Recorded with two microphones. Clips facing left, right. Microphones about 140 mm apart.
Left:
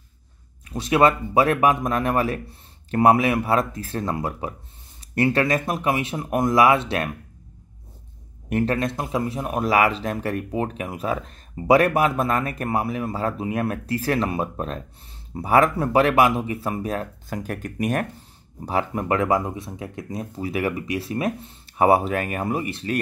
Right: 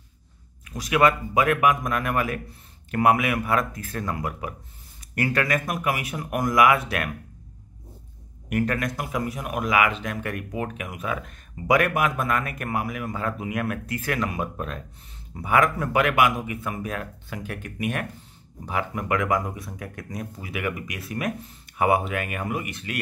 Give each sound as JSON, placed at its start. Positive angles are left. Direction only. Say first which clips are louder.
{"t": 0.7, "sound": "speech", "louder": "left 3 dB", "side_deg": 30}
{"t": 8.5, "sound": "speech", "louder": "left 3 dB", "side_deg": 30}